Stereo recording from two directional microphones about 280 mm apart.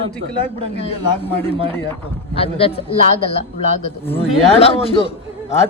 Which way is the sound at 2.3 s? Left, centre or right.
Left.